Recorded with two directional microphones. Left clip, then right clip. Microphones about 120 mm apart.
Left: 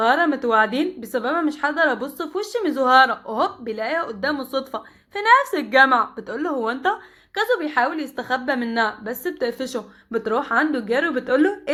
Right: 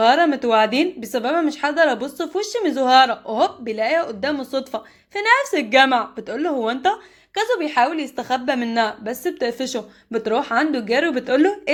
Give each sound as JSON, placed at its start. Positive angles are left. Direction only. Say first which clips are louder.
{"t": 0.0, "sound": "a woman's voice", "louder": "right 3 dB", "side_deg": -40}